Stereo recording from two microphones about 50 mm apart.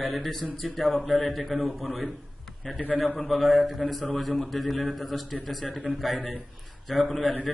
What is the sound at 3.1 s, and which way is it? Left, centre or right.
A man's voice, centre.